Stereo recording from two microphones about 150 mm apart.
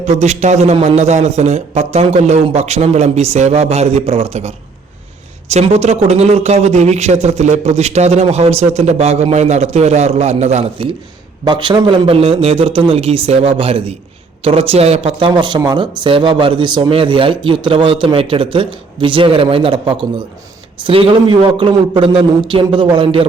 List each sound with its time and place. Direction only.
0.0 s a man's voice: 50° right (ahead or behind)
11.4 s speech: 30° right (ahead or behind)